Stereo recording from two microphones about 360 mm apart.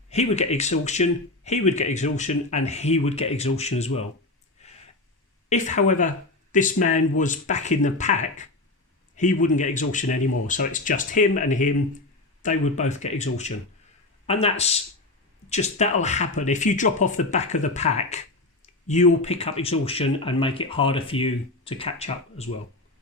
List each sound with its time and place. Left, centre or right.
0.1 s speech: centre
4.6 s a sound: centre
5.5 s speech: centre